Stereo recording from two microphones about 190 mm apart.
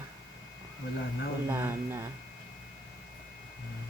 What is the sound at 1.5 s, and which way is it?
Speech, 10° right (ahead or behind).